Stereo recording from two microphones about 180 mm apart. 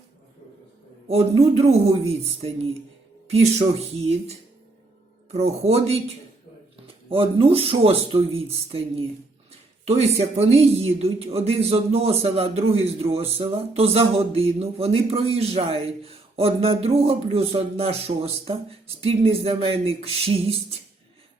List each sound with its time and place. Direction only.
1.0 s speech: 35° right (ahead or behind)
5.3 s speech: 35° right (ahead or behind)